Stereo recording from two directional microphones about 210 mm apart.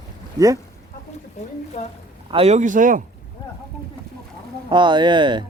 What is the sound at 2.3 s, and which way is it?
Speech, 30° right (ahead or behind).